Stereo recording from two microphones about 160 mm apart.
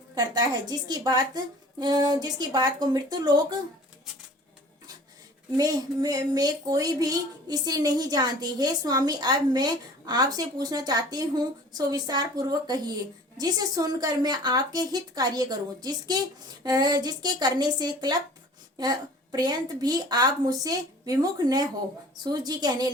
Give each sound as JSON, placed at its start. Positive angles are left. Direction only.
{"t": 0.1, "sound": "a woman's voice", "side_deg": -25}
{"t": 5.5, "sound": "a woman's voice", "side_deg": -25}